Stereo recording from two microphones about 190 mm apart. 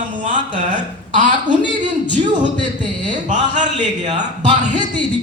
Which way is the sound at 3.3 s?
40° right (ahead or behind).